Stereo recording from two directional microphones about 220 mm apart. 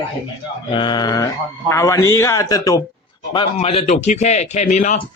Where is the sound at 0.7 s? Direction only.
20° left (ahead or behind).